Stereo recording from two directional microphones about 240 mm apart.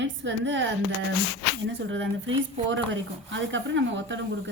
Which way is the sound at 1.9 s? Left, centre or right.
Right.